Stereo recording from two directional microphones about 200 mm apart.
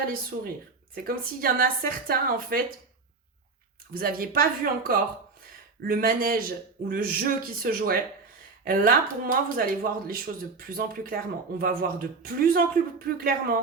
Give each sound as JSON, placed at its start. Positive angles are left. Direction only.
{"t": 0.1, "sound": "speech", "side_deg": -45}
{"t": 3.9, "sound": "speech", "side_deg": -45}